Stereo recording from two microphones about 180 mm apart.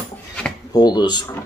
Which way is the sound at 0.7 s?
20° left (ahead or behind).